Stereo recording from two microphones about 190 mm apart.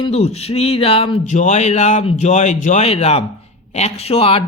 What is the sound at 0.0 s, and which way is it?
Speech, 35° left (ahead or behind).